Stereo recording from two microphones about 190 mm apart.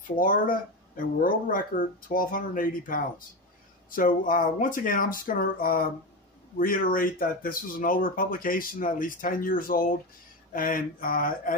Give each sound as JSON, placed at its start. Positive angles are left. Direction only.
{"t": 0.2, "sound": "speech", "side_deg": 45}